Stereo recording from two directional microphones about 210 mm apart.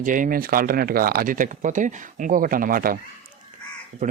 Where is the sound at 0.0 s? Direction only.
40° right (ahead or behind).